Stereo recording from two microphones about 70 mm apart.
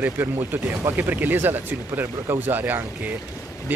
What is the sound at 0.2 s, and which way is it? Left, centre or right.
Speech, right.